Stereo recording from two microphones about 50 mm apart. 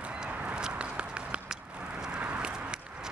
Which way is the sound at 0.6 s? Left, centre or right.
Centre.